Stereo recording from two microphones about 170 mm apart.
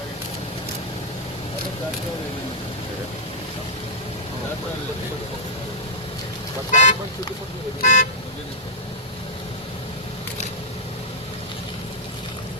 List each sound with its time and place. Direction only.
6.7 s speech: 45° left (ahead or behind)